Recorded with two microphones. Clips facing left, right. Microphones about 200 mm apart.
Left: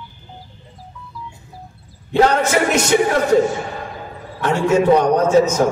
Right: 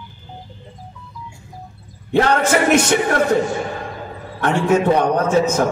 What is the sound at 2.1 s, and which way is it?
Speech, 55° right (ahead or behind).